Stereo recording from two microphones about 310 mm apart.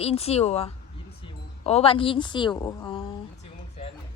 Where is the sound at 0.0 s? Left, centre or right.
Centre.